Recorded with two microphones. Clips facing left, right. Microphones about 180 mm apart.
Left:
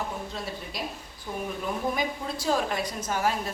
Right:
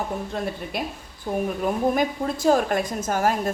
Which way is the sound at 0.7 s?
55° right (ahead or behind).